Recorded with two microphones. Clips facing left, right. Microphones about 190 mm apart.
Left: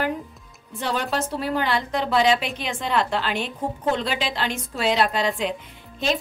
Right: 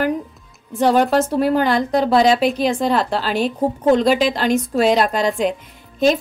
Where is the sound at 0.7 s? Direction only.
45° right (ahead or behind).